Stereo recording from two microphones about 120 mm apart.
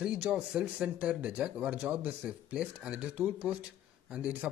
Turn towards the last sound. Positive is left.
turn(degrees=-10)  # may be behind; listen again after turning